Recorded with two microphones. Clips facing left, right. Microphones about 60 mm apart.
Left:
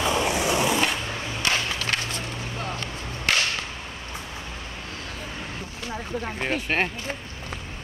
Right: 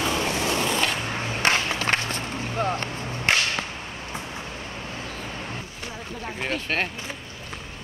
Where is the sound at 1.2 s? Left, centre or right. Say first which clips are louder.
Right 5 dB; right.